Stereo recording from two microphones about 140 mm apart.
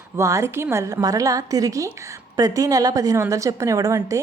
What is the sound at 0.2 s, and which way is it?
A woman's voice, 20° right (ahead or behind).